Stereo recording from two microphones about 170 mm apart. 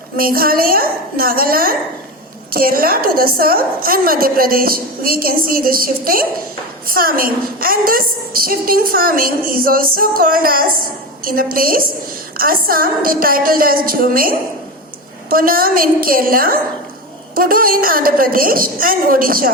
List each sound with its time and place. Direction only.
0.2 s a woman's voice: 60° right (ahead or behind)